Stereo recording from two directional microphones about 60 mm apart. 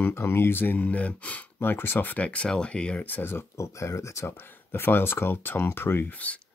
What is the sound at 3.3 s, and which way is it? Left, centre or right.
Speech, left.